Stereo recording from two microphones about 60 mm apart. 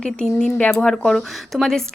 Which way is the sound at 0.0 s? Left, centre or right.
Centre.